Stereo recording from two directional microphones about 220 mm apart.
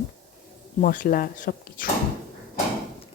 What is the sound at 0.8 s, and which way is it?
Speech, 40° left (ahead or behind).